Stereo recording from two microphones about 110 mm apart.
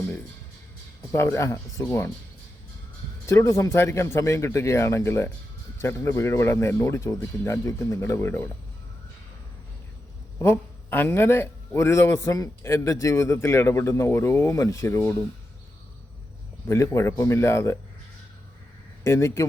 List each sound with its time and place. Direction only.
1.1 s a man's voice: 25° left (ahead or behind)
3.2 s a man's voice: 25° left (ahead or behind)
10.3 s a man's voice: 20° left (ahead or behind)
16.6 s a man's voice: 25° left (ahead or behind)
19.0 s a man's voice: 25° left (ahead or behind)